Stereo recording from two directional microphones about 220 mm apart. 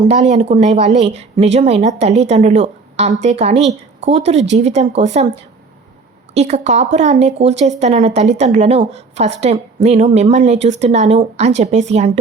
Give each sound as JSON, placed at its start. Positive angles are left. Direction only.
{"t": 0.0, "sound": "a woman's voice", "side_deg": -30}
{"t": 6.3, "sound": "a woman's voice", "side_deg": -30}